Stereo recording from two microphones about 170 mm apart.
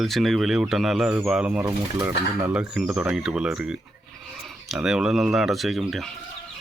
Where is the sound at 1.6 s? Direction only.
20° right (ahead or behind).